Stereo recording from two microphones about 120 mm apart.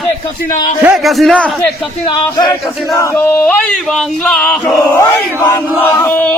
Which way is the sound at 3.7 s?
5° left (ahead or behind).